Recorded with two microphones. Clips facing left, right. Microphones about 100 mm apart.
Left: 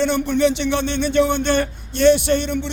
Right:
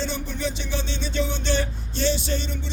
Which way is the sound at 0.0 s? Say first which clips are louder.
Left 11 dB; 65° left (ahead or behind).